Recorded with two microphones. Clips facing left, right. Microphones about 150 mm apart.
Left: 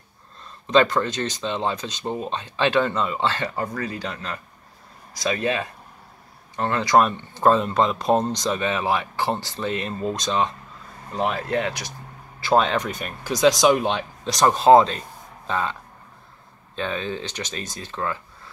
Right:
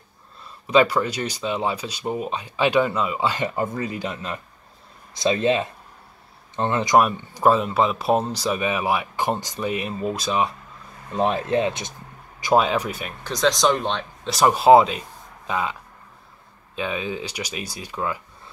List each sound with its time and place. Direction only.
0.7 s speech: 10° right (ahead or behind)
11.1 s speech: 20° right (ahead or behind)
12.4 s speech: 10° right (ahead or behind)
13.2 s speech: 10° left (ahead or behind)
14.3 s speech: 10° right (ahead or behind)